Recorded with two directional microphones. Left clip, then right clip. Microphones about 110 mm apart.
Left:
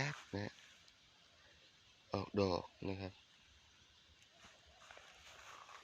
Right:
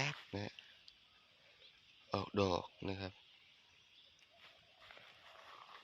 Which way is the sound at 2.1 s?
5° left (ahead or behind).